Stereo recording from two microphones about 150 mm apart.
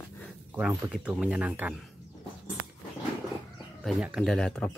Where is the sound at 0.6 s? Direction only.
5° right (ahead or behind).